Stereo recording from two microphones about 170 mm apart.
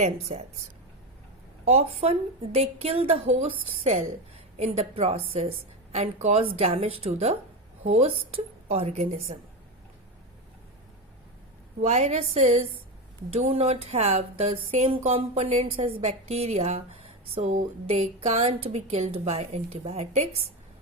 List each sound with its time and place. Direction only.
0.0 s speech: 40° right (ahead or behind)
1.6 s speech: 35° right (ahead or behind)
4.6 s speech: 40° right (ahead or behind)
11.8 s speech: 40° right (ahead or behind)